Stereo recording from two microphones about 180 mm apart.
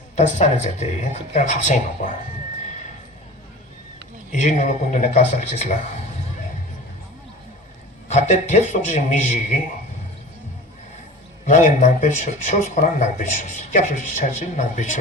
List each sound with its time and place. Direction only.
0.2 s speech: 40° left (ahead or behind)
4.3 s speech: 45° left (ahead or behind)
8.0 s speech: 40° left (ahead or behind)
11.4 s speech: 45° left (ahead or behind)